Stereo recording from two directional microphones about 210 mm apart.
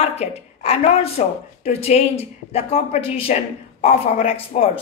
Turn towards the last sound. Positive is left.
turn(degrees=30)  # may be behind; listen again after turning